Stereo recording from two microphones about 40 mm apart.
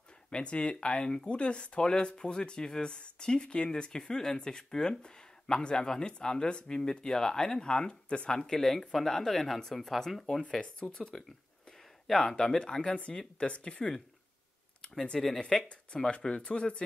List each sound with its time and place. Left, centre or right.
0.3 s speech: left
8.3 s speech: centre
10.5 s speech: left
15.1 s speech: centre
15.4 s speech: left